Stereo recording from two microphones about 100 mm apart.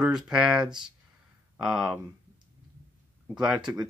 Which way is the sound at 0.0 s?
5° right (ahead or behind).